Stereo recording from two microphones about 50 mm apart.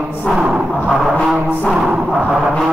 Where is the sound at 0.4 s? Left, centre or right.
Centre.